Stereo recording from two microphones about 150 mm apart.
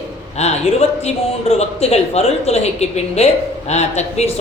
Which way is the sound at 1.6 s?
45° left (ahead or behind).